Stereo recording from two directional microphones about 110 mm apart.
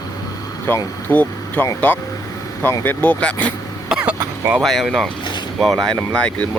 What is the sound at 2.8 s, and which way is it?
Speech, 15° left (ahead or behind).